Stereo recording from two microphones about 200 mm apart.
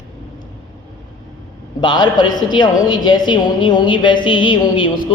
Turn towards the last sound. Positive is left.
turn(degrees=25)  # may be behind; listen again after turning